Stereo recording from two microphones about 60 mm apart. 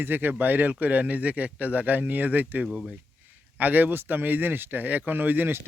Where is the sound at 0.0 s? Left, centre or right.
Right.